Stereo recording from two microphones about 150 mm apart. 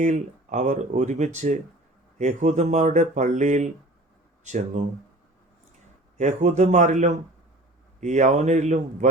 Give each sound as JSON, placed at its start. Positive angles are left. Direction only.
{"t": 0.0, "sound": "speech", "side_deg": -55}
{"t": 6.1, "sound": "speech", "side_deg": -50}